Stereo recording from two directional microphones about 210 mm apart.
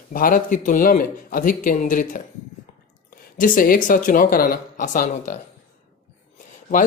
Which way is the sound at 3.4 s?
40° left (ahead or behind).